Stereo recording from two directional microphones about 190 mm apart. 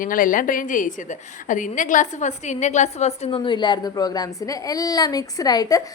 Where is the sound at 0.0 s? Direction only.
45° left (ahead or behind).